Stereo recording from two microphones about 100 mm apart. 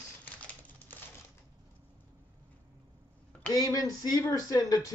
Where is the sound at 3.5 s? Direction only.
40° left (ahead or behind).